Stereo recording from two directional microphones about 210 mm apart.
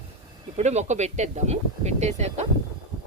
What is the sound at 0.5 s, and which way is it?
Speech, 35° right (ahead or behind).